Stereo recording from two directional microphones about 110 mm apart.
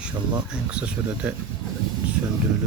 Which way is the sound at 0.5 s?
10° right (ahead or behind).